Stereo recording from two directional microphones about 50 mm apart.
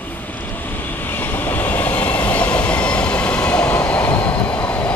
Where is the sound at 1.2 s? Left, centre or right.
Left.